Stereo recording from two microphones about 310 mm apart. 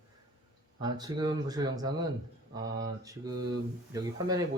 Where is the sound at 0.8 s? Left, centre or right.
Centre.